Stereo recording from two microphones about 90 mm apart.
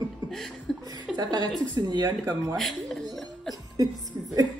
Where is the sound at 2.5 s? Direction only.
Centre (ahead or behind).